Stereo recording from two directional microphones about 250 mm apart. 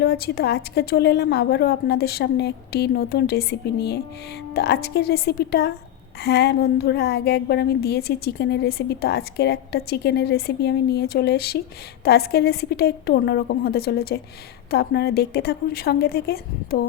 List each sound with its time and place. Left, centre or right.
0.0 s a woman's voice: left